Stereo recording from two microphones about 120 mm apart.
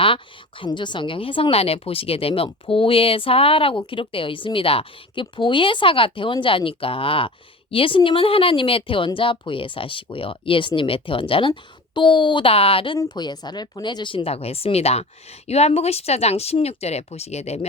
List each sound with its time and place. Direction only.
0.6 s a woman's voice: 40° left (ahead or behind)
13.0 s a woman's voice: 35° left (ahead or behind); by 17.7 s 60° left (ahead or behind)